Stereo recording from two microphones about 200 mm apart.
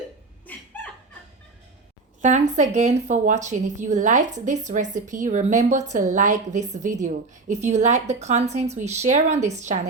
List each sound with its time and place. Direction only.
0.4 s chuckle: 10° left (ahead or behind)
2.2 s a woman's voice: 35° right (ahead or behind)